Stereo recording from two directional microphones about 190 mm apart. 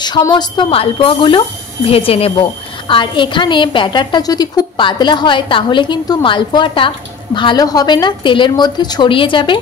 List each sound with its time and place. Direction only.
0.0 s a woman's voice: 20° left (ahead or behind)